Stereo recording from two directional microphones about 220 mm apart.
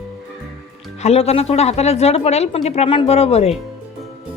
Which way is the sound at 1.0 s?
30° left (ahead or behind).